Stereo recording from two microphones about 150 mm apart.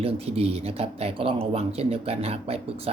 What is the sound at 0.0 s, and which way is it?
Speech, 45° right (ahead or behind).